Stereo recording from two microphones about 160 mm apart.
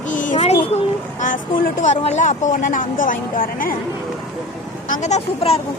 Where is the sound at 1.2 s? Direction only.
60° left (ahead or behind).